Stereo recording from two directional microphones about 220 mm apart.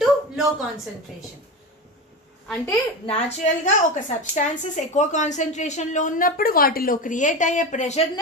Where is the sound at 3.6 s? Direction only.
35° left (ahead or behind).